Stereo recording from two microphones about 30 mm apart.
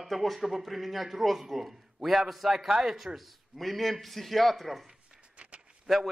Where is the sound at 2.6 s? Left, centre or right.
Centre.